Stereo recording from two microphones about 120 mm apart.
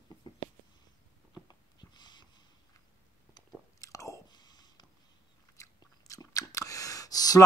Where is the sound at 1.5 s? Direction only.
35° left (ahead or behind).